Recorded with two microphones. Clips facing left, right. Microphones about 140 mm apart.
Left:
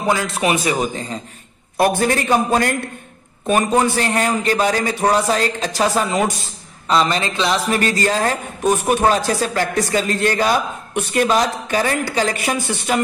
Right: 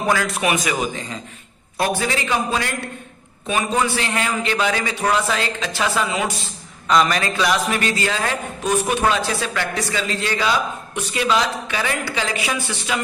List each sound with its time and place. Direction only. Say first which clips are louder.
0.0 s a man's voice: left 1 dB; 25° left (ahead or behind)
1.8 s a man's voice: left 5 dB; 50° left (ahead or behind)
6.9 s a man's voice: even; 30° left (ahead or behind); by 13.0 s 45° left (ahead or behind)